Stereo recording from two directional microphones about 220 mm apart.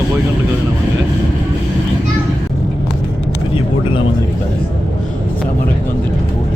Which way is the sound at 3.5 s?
25° left (ahead or behind).